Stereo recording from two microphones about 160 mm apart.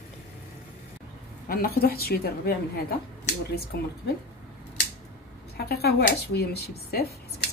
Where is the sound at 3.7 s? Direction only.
90° left.